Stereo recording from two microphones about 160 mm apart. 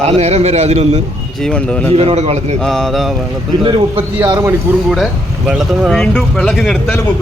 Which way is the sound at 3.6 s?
35° right (ahead or behind).